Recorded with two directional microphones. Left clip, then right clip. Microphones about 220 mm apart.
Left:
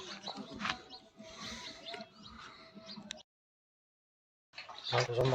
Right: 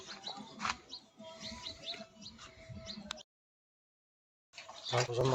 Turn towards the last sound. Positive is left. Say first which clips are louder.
# left 1 dB
turn(degrees=-5)  # may be behind; listen again after turning